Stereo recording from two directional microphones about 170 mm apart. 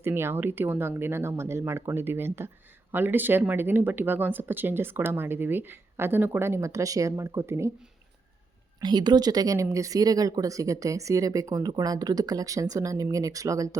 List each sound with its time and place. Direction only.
0.0 s speech: 15° right (ahead or behind)
8.8 s speech: 25° right (ahead or behind)